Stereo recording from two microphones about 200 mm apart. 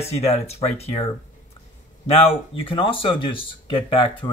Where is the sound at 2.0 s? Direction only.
30° left (ahead or behind).